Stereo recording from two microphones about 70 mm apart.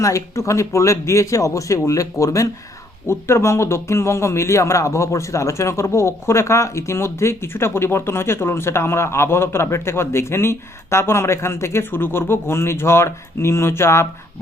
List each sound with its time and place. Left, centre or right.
0.0 s a man's voice: left